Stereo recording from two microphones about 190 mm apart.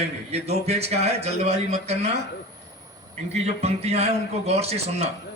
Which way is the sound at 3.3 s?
35° right (ahead or behind).